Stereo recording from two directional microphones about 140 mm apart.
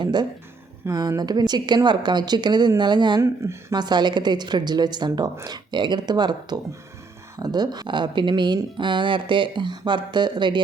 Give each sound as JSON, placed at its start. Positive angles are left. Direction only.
{"t": 0.0, "sound": "a woman's voice", "side_deg": -30}
{"t": 3.2, "sound": "a woman's voice", "side_deg": -20}